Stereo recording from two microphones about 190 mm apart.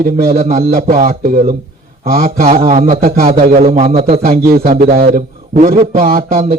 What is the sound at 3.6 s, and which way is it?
Speech, 35° right (ahead or behind).